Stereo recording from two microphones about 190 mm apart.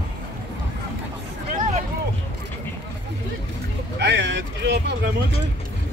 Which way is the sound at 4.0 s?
65° right (ahead or behind).